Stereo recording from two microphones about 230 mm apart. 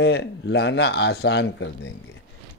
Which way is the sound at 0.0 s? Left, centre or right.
Left.